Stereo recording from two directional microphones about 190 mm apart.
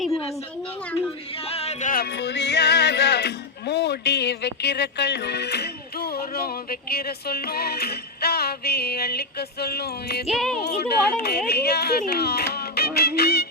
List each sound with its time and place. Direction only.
1.5 s music: 30° left (ahead or behind); by 10.2 s 55° left (ahead or behind)
10.2 s speech: centre (ahead or behind)
10.6 s speech: 60° left (ahead or behind)